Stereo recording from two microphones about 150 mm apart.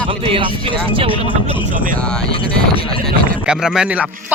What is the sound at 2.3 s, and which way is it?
Speech, 40° left (ahead or behind).